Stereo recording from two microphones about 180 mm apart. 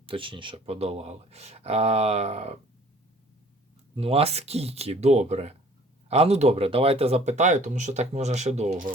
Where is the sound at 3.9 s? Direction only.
35° right (ahead or behind).